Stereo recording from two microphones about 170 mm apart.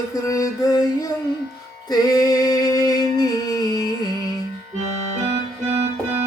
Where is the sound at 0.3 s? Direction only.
20° left (ahead or behind).